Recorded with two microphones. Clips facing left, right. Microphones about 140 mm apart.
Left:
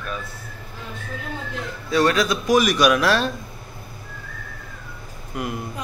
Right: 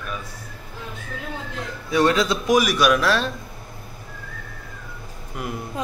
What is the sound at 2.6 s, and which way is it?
Speech, 5° right (ahead or behind).